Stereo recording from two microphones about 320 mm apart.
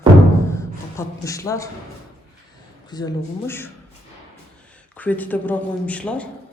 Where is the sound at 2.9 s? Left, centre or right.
Centre.